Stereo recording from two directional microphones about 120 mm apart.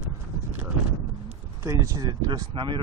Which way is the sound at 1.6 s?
25° right (ahead or behind).